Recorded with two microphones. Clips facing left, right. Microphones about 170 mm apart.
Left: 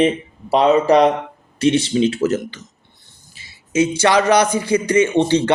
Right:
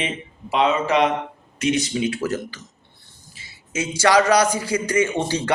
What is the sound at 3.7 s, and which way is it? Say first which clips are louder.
A man's voice: left 3 dB; 25° left (ahead or behind).